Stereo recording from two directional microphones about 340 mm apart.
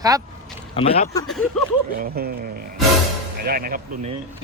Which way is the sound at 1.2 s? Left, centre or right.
Centre.